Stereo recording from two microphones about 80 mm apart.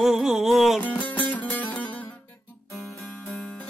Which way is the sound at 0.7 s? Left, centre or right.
Centre.